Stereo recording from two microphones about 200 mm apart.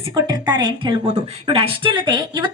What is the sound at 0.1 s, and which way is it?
A woman's voice, 20° right (ahead or behind).